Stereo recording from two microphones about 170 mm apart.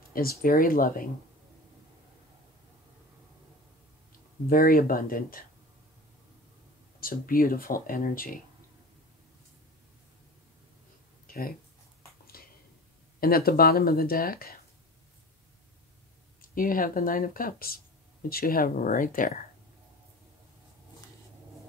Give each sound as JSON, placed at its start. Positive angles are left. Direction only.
{"t": 0.1, "sound": "speech", "side_deg": 60}
{"t": 4.5, "sound": "speech", "side_deg": 55}
{"t": 7.0, "sound": "speech", "side_deg": 55}
{"t": 11.2, "sound": "a sound", "side_deg": 55}
{"t": 13.2, "sound": "speech", "side_deg": 60}
{"t": 16.3, "sound": "speech", "side_deg": 55}